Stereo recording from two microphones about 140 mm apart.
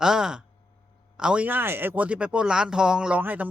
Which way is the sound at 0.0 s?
5° right (ahead or behind).